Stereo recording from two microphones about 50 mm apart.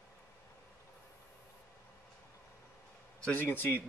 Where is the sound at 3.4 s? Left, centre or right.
Left.